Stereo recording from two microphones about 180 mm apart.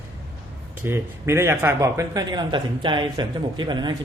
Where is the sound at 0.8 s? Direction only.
15° right (ahead or behind).